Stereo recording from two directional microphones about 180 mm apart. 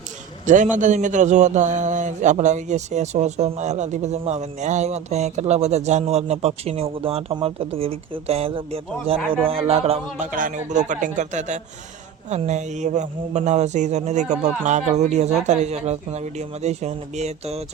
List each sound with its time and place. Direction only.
0.4 s a man's voice: 45° right (ahead or behind)
10.3 s a man's voice: 45° right (ahead or behind)